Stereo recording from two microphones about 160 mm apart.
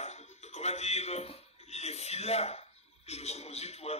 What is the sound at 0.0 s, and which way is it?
Music, 45° left (ahead or behind).